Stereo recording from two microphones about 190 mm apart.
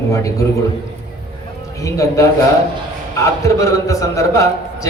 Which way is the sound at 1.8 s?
15° left (ahead or behind).